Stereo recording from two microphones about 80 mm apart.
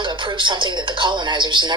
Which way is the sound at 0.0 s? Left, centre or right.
Right.